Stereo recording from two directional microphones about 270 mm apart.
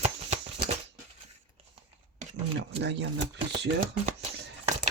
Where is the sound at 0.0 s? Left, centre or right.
Right.